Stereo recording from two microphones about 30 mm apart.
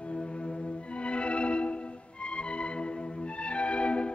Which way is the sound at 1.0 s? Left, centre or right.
Left.